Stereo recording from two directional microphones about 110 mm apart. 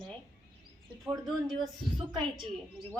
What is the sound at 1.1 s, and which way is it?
Speech, 5° right (ahead or behind).